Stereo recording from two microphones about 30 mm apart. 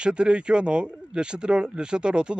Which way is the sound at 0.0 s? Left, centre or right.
Right.